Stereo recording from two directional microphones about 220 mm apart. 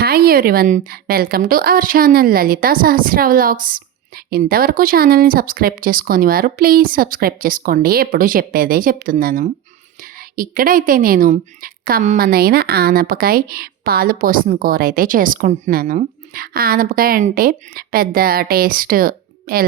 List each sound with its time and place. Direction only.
0.0 s a woman's voice: 45° right (ahead or behind)